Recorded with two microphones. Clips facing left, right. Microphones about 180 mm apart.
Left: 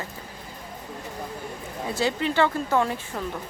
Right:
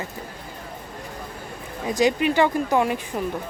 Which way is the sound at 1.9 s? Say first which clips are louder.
Right 6 dB; 15° right (ahead or behind).